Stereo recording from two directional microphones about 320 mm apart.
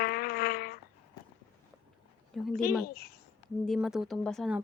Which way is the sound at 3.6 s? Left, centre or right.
Centre.